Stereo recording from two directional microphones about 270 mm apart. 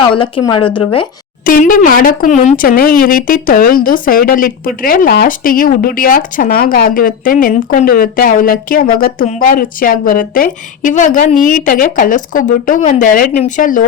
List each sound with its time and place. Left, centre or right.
0.1 s speech: centre
1.5 s speech: left